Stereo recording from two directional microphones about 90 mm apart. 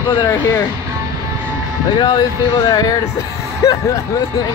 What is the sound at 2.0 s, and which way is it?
Speech, 50° left (ahead or behind).